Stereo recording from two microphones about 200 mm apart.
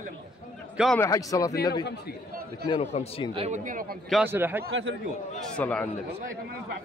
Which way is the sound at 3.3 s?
35° right (ahead or behind).